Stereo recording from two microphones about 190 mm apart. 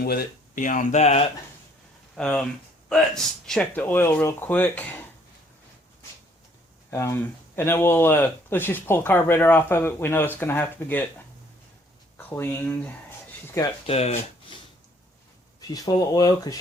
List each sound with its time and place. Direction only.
0.0 s speech: 55° left (ahead or behind); by 1.2 s 35° left (ahead or behind)
2.1 s speech: 5° left (ahead or behind)
6.9 s speech: 15° left (ahead or behind)
12.1 s speech: 10° left (ahead or behind)
13.8 s speech: 35° left (ahead or behind)
15.6 s speech: 20° left (ahead or behind)